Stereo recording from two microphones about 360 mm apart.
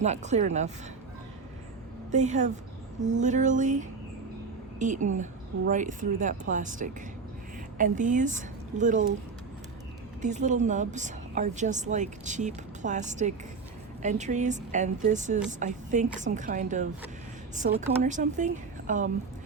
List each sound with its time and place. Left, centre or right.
0.0 s a woman's voice: centre
2.0 s a woman's voice: centre
10.2 s a woman's voice: centre